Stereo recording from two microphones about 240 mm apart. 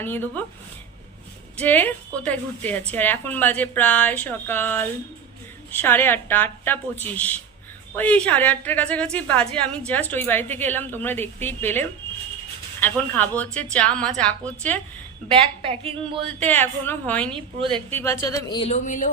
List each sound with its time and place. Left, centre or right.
0.0 s a woman's voice: centre
1.6 s a woman's voice: centre
15.6 s a woman's voice: right
16.4 s a woman's voice: centre
17.3 s a woman's voice: right
17.9 s speech: centre; by 19.1 s left